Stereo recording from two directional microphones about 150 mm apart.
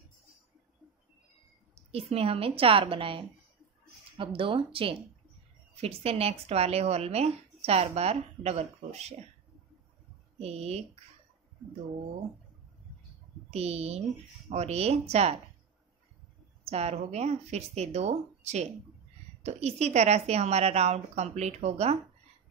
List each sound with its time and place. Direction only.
1.9 s a woman's voice: 40° right (ahead or behind)
10.4 s speech: 45° right (ahead or behind)
13.5 s speech: 45° right (ahead or behind)
16.6 s speech: 45° right (ahead or behind)